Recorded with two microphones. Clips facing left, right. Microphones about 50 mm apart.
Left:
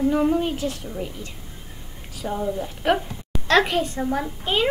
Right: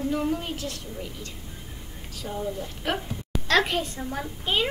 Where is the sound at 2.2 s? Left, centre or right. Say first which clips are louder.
Left 5 dB; left.